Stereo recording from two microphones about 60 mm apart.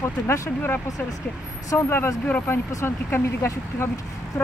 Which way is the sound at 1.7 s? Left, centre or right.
Left.